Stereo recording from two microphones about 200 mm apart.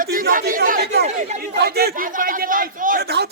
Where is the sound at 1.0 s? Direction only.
35° right (ahead or behind); by 3.3 s 55° right (ahead or behind).